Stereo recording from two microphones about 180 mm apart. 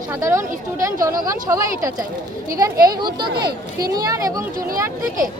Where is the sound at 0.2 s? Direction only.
15° right (ahead or behind).